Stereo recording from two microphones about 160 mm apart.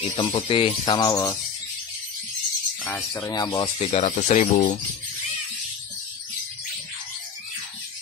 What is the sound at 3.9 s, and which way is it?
Speech, 45° left (ahead or behind).